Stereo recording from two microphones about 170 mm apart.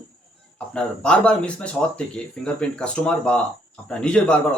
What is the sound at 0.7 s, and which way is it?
Speech, 5° left (ahead or behind).